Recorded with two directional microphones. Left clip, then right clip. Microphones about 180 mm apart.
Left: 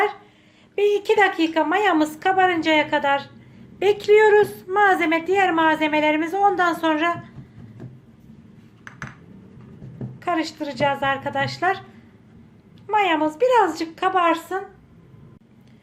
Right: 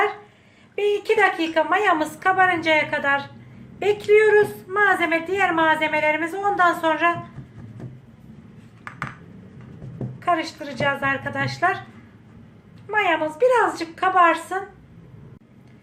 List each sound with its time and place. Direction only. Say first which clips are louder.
0.8 s a woman's voice: left 1 dB; 50° left (ahead or behind)
10.2 s a woman's voice: right 2 dB; 50° left (ahead or behind)
12.9 s a woman's voice: left 1 dB; 50° left (ahead or behind)